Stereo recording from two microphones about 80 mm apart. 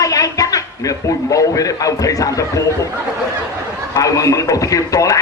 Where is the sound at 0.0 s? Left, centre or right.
Left.